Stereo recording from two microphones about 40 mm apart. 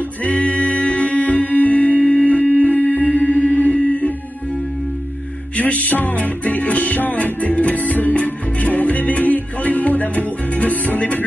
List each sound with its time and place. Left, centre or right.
0.2 s music: left
5.6 s music: left